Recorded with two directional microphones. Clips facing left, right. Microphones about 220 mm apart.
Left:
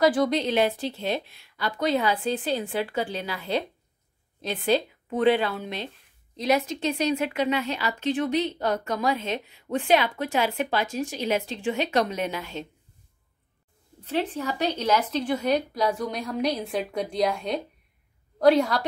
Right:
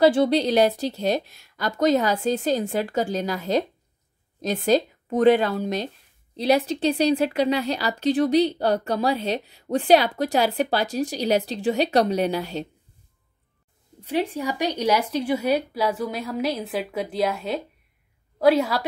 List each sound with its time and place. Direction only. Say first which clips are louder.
0.0 s a woman's voice: right 4 dB; 30° right (ahead or behind)
14.0 s a woman's voice: right 3 dB; 10° right (ahead or behind)